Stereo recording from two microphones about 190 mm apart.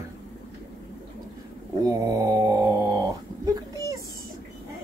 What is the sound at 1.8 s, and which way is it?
Speech, 20° right (ahead or behind).